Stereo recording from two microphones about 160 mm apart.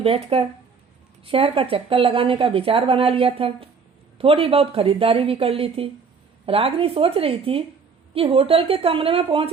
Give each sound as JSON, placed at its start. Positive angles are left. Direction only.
{"t": 0.0, "sound": "speech", "side_deg": -35}